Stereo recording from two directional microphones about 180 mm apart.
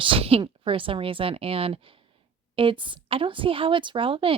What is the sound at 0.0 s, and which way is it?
A woman's voice, 30° right (ahead or behind).